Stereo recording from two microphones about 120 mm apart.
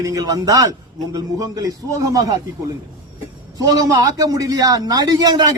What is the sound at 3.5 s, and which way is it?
A man's voice, 30° right (ahead or behind).